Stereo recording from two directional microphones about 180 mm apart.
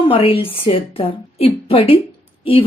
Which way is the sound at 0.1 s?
30° left (ahead or behind).